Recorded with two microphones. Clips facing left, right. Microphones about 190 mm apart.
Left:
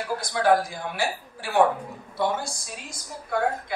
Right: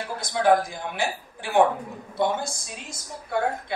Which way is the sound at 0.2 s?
20° right (ahead or behind).